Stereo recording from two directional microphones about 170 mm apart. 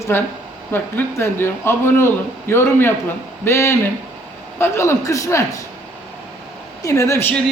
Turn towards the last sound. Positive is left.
turn(degrees=15)  # may be behind; listen again after turning